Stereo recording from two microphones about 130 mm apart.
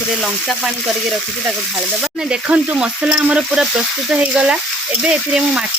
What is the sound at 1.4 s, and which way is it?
Frying, 5° right (ahead or behind).